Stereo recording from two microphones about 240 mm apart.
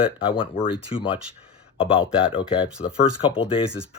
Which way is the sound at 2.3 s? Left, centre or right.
Left.